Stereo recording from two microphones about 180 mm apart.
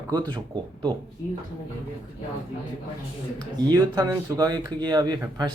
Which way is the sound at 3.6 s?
25° right (ahead or behind).